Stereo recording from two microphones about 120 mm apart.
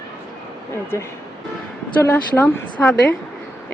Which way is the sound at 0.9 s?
20° left (ahead or behind).